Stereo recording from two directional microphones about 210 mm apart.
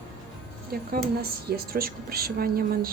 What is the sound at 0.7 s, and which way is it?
A woman's voice, 45° right (ahead or behind).